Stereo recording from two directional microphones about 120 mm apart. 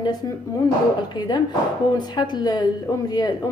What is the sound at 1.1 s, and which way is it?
A woman's voice, 40° left (ahead or behind).